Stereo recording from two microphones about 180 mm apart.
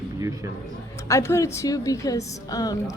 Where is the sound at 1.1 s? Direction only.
15° left (ahead or behind).